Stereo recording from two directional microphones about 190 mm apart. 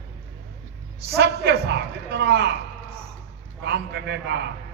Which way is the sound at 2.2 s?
60° right (ahead or behind).